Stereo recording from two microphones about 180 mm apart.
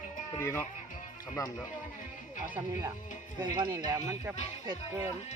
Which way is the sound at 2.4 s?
10° right (ahead or behind).